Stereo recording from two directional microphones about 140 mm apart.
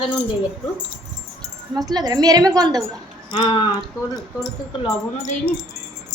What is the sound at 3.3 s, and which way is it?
Speech, 35° left (ahead or behind).